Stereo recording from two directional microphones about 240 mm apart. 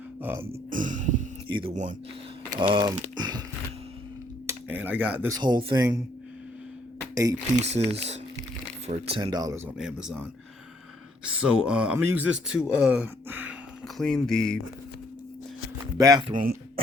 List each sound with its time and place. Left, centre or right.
0.2 s music: centre
0.4 s music: right
1.5 s speech: right
2.7 s speech: centre
4.4 s speech: centre
7.5 s speech: right
9.7 s speech: centre
11.3 s speech: centre
16.0 s speech: centre
16.3 s a sound: right